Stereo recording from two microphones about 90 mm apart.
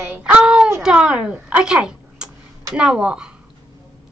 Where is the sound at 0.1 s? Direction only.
10° right (ahead or behind).